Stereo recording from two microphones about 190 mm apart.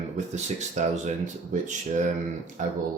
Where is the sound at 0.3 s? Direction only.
40° right (ahead or behind).